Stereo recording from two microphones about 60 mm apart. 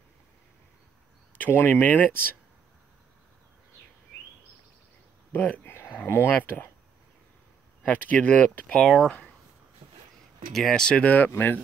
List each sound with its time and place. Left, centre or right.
1.5 s speech: left
5.3 s speech: left
6.3 s speech: left
7.8 s speech: left
8.6 s speech: centre
10.5 s speech: centre
11.0 s speech: left